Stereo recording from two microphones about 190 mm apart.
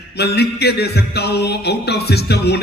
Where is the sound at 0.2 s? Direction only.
60° left (ahead or behind).